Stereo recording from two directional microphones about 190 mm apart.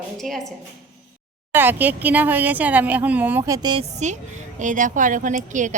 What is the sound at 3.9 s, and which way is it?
A woman's voice, 40° right (ahead or behind).